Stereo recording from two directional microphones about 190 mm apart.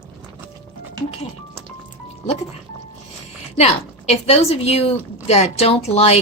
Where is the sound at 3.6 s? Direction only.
35° left (ahead or behind).